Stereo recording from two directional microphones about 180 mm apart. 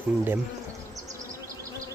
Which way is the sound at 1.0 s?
20° right (ahead or behind).